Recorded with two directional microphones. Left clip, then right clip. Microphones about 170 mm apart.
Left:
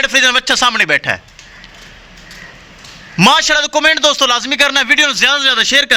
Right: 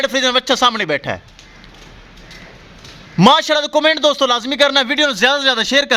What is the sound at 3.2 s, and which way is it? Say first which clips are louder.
A man's voice: left 2 dB; 20° right (ahead or behind).